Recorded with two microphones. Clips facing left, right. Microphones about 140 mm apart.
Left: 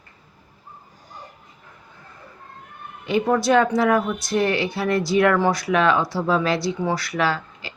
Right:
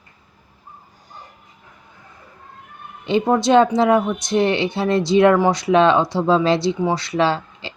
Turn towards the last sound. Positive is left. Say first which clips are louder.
# right 4 dB
turn(degrees=-25)  # may be behind; listen again after turning